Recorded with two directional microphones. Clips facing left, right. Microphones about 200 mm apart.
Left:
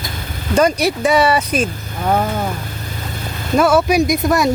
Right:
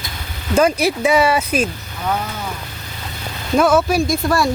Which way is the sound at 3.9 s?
20° left (ahead or behind).